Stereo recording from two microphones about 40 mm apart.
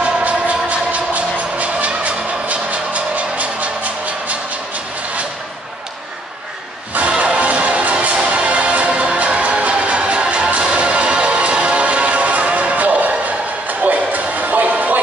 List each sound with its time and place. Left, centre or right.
0.0 s music: right
7.1 s music: right